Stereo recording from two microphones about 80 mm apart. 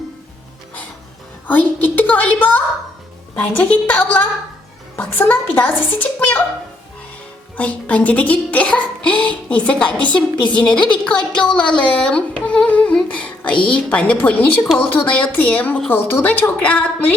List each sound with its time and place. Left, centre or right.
1.5 s a woman's voice: left
7.5 s a child's voice: centre
11.0 s music: centre
13.1 s a woman's voice: centre